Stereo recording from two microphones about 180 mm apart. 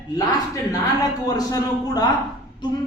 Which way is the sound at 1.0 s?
20° left (ahead or behind).